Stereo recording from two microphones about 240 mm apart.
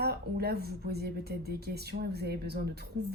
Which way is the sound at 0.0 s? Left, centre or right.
Right.